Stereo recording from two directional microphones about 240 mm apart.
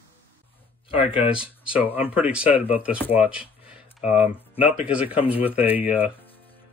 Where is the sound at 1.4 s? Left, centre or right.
Centre.